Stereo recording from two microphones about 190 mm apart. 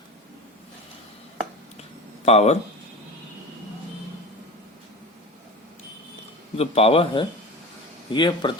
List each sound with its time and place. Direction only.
2.2 s speech: 35° left (ahead or behind)
6.6 s a man's voice: 30° left (ahead or behind)